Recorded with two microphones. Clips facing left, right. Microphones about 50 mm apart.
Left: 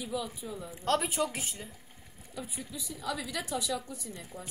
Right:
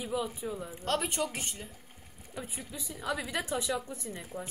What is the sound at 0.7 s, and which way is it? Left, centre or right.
A woman's voice, centre.